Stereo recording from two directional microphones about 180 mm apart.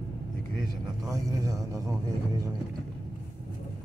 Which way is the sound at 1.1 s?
20° right (ahead or behind).